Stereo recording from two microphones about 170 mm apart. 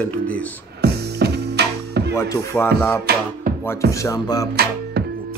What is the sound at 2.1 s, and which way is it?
Speech, 15° left (ahead or behind).